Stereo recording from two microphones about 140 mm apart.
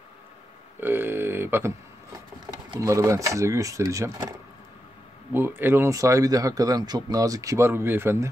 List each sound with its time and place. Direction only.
0.7 s a sound: 15° right (ahead or behind)
2.7 s speech: 25° right (ahead or behind)
5.3 s speech: 15° right (ahead or behind)